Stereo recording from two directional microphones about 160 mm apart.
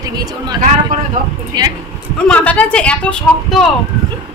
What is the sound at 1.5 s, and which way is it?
Speech, 25° right (ahead or behind).